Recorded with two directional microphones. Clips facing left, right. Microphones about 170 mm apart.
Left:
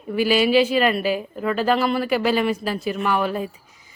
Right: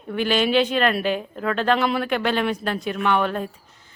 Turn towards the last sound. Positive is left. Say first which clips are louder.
# even
turn(degrees=5)  # may be behind; listen again after turning